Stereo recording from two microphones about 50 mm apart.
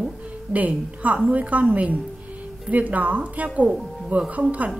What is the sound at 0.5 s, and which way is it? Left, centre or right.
A woman's voice, right.